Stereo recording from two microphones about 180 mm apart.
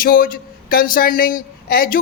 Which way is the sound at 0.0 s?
55° left (ahead or behind).